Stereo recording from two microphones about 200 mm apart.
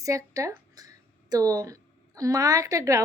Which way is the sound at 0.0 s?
15° right (ahead or behind).